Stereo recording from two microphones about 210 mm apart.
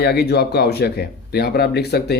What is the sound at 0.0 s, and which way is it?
Speech, 50° left (ahead or behind).